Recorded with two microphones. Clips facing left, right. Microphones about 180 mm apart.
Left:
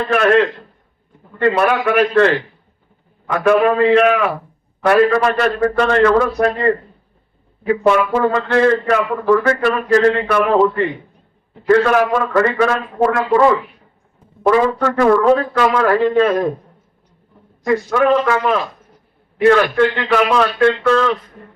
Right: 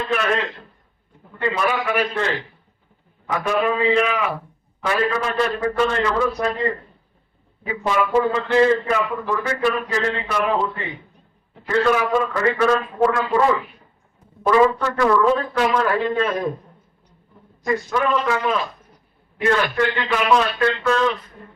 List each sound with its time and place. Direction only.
0.1 s a man's voice: 65° left (ahead or behind)
3.3 s a man's voice: 60° left (ahead or behind)
14.4 s a man's voice: 60° left (ahead or behind)
17.7 s a man's voice: 70° left (ahead or behind)